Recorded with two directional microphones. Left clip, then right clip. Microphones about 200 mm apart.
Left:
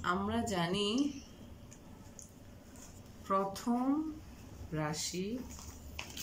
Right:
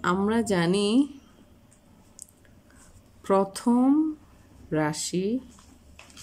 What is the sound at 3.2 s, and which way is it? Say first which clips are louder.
Speech: right 10 dB; 50° right (ahead or behind).